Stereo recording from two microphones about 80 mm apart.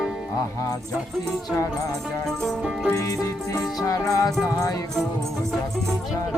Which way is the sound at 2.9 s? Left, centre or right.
Left.